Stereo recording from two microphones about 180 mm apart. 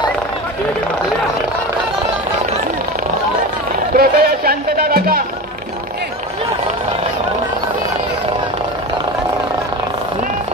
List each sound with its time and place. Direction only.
3.9 s music: 55° right (ahead or behind)